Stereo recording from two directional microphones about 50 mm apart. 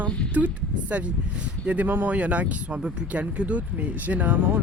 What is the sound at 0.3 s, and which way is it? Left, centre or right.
Speech, right.